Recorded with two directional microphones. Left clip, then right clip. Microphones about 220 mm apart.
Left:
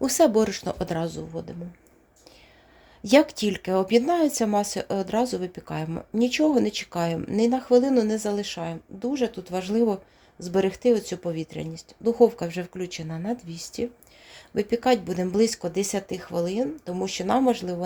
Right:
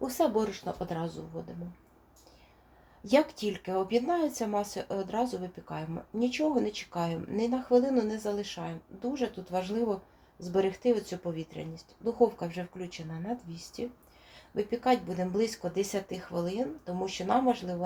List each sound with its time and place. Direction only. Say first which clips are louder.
0.0 s speech: left 8 dB; 55° left (ahead or behind)
3.0 s speech: left 7 dB; 55° left (ahead or behind)